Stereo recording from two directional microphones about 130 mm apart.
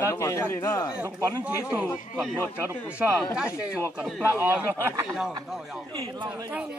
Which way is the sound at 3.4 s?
20° left (ahead or behind).